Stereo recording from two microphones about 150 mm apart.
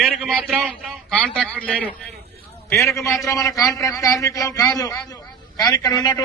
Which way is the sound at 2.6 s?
20° left (ahead or behind).